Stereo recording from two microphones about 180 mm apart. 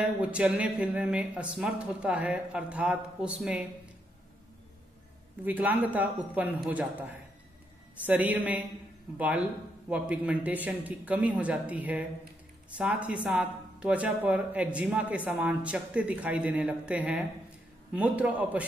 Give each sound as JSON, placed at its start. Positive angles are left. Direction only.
{"t": 0.0, "sound": "a woman's voice", "side_deg": -5}
{"t": 5.4, "sound": "a woman's voice", "side_deg": -10}
{"t": 9.8, "sound": "a woman's voice", "side_deg": -5}